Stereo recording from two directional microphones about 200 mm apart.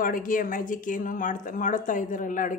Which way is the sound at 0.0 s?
45° left (ahead or behind).